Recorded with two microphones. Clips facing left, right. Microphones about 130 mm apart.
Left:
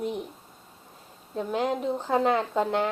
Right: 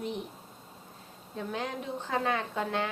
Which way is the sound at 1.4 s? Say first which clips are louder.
Left 8 dB; 20° left (ahead or behind).